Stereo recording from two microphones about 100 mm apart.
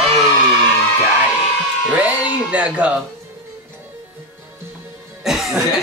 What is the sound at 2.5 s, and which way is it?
Speech, 15° right (ahead or behind).